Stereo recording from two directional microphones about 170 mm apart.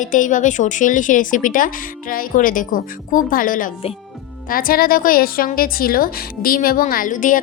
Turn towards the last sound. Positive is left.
turn(degrees=50)  # may be behind; listen again after turning